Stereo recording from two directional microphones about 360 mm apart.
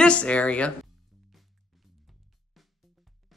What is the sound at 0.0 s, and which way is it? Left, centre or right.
Speech, centre.